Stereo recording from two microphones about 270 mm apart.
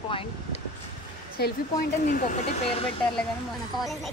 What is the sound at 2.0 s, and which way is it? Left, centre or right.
Speech, left.